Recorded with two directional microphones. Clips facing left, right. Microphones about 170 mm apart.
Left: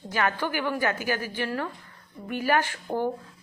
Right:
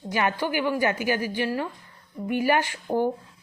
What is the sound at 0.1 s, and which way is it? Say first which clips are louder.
Speech: right 2 dB; 15° right (ahead or behind).